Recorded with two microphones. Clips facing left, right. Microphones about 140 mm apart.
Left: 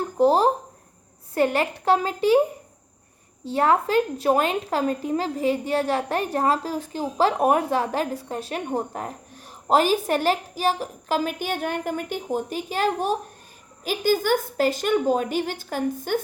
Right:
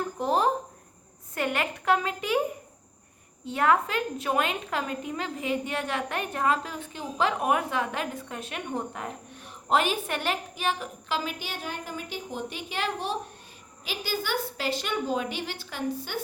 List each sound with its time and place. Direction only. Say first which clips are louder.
0.2 s a woman's voice: left 7 dB; 35° left (ahead or behind)
3.4 s a woman's voice: left 3 dB; 30° left (ahead or behind); by 16.2 s 50° left (ahead or behind)